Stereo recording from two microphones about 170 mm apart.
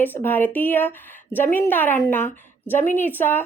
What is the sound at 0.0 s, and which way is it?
A woman's voice, 10° left (ahead or behind).